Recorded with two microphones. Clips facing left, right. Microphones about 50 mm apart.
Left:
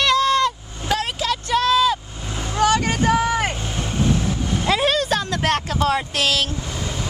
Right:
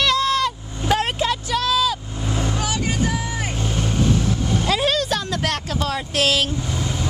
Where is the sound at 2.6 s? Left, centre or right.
Left.